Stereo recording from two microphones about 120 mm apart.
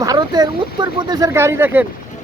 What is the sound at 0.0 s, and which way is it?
Speech, 35° right (ahead or behind).